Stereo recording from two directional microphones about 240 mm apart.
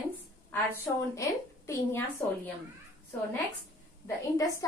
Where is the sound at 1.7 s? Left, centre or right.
Centre.